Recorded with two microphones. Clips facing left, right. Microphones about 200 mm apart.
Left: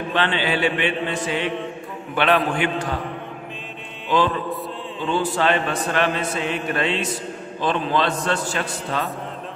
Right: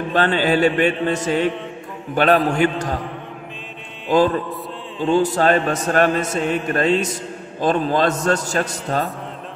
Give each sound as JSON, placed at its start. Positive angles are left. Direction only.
{"t": 0.1, "sound": "mantra", "side_deg": -40}
{"t": 4.1, "sound": "speech", "side_deg": -45}
{"t": 6.7, "sound": "mantra", "side_deg": -40}
{"t": 7.6, "sound": "speech", "side_deg": -45}